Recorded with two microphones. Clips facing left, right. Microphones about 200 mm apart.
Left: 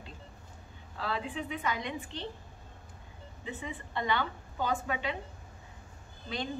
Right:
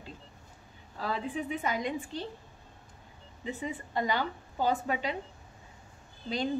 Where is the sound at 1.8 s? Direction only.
40° right (ahead or behind).